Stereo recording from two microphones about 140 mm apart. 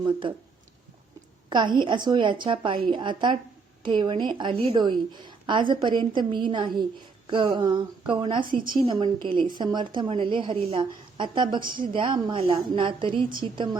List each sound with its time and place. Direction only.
0.0 s a woman's voice: 35° right (ahead or behind)
1.5 s a woman's voice: 35° right (ahead or behind)
11.6 s a woman's voice: 80° right
11.9 s a woman's voice: 35° right (ahead or behind)